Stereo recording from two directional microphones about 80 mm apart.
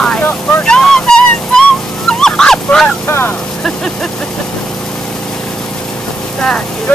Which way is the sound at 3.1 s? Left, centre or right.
Left.